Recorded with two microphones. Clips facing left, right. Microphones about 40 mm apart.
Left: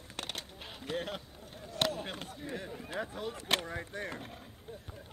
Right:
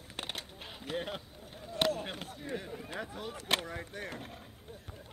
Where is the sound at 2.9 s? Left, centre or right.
Left.